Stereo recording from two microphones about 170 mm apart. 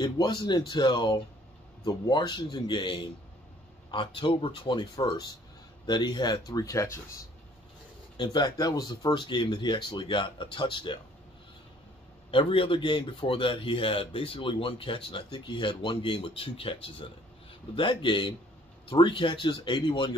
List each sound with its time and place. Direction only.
0.0 s speech: 25° left (ahead or behind)
8.2 s speech: 25° left (ahead or behind)
12.3 s speech: 30° left (ahead or behind)